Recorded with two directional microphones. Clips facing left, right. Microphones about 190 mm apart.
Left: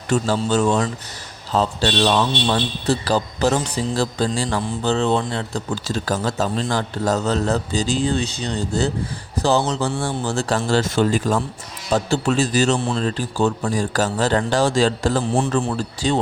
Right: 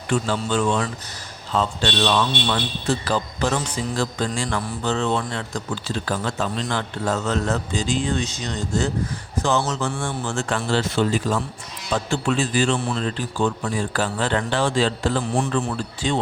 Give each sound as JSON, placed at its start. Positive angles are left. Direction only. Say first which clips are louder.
{"t": 0.1, "sound": "a man's voice", "louder": "left 3 dB", "side_deg": 40}